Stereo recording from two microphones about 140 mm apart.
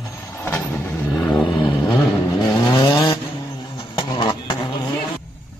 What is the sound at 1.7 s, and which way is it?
Vehicle, 30° left (ahead or behind).